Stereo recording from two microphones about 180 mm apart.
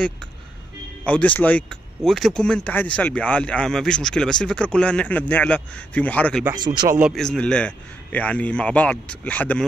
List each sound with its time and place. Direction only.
1.0 s speech: 5° left (ahead or behind)
6.5 s speech: 25° right (ahead or behind)
7.0 s speech: centre (ahead or behind)